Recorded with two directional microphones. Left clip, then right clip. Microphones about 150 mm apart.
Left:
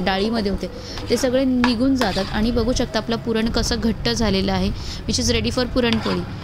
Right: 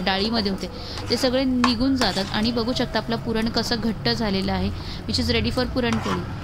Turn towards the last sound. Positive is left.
turn(degrees=35)  # may be behind; listen again after turning